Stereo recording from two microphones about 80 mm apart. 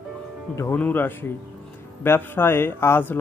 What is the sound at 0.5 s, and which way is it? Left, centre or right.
Speech, left.